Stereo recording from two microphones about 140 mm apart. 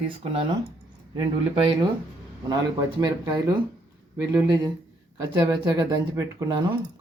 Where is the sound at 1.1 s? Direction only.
35° right (ahead or behind).